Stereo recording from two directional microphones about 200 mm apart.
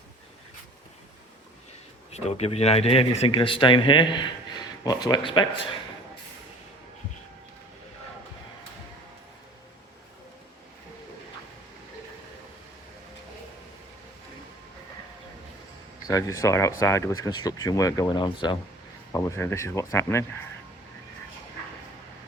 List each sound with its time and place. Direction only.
2.1 s speech: 30° left (ahead or behind)
16.0 s speech: 15° left (ahead or behind)